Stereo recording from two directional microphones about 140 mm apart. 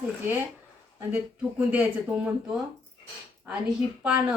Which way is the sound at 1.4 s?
10° right (ahead or behind).